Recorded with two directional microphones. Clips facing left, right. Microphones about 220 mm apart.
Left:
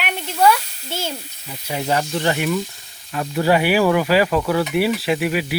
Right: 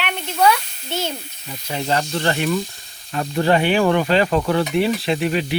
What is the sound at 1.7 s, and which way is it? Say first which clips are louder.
Speech: left 1 dB; 10° left (ahead or behind).